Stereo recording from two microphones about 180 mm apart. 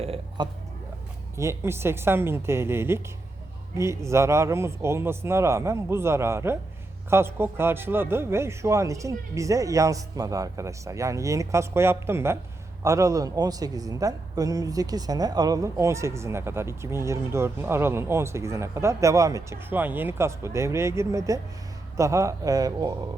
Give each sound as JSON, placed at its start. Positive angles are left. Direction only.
{"t": 0.0, "sound": "speech", "side_deg": -35}
{"t": 1.4, "sound": "a man's voice", "side_deg": -15}